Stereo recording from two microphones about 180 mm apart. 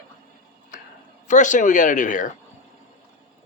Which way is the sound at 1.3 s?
45° left (ahead or behind).